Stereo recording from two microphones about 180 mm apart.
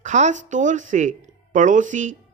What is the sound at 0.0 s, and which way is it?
Speech, 40° right (ahead or behind).